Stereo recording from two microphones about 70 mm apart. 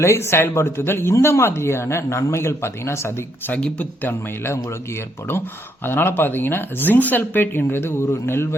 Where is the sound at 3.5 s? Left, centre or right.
Centre.